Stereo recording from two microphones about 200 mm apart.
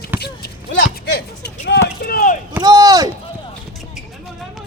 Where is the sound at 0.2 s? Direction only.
55° left (ahead or behind).